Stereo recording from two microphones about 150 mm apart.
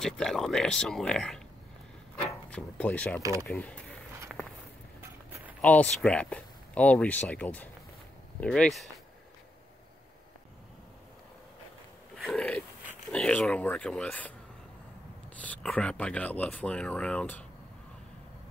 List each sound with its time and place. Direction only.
0.0 s speech: 5° left (ahead or behind)
2.5 s speech: 10° left (ahead or behind)
3.2 s speech: 20° right (ahead or behind)
3.4 s speech: 10° left (ahead or behind)
5.6 s speech: 10° left (ahead or behind)
12.2 s a sound: 5° left (ahead or behind)
13.1 s speech: 5° left (ahead or behind)
15.4 s speech: 10° left (ahead or behind)